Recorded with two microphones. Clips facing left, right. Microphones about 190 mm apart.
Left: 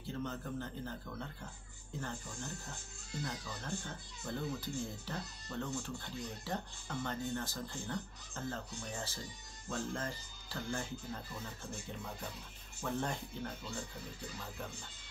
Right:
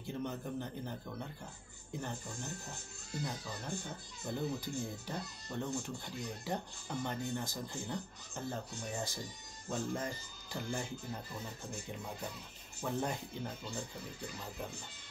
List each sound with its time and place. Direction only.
0.0 s speech: 15° right (ahead or behind)
12.8 s speech: 10° right (ahead or behind)